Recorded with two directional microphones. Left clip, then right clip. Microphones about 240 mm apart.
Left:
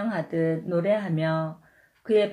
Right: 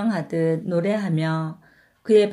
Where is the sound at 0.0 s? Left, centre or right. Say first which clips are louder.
Right 3 dB; right.